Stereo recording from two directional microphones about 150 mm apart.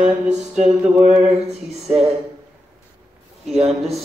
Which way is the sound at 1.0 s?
50° right (ahead or behind).